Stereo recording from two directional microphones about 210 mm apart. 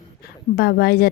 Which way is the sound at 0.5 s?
50° left (ahead or behind).